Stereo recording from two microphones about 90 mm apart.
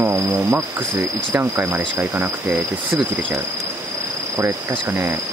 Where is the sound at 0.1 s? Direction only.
25° right (ahead or behind).